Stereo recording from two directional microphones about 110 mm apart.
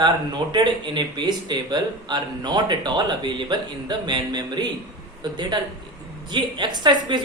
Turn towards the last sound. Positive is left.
turn(degrees=-45)  # may be behind; listen again after turning